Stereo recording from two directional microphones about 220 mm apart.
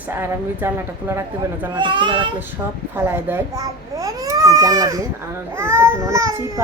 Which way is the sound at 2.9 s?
10° right (ahead or behind).